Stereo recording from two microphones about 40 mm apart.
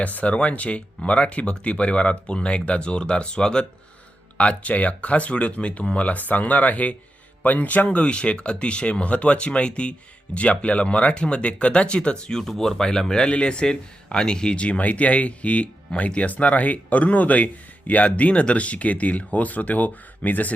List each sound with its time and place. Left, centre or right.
0.0 s speech: left
4.4 s speech: left
12.3 s speech: centre; by 20.5 s left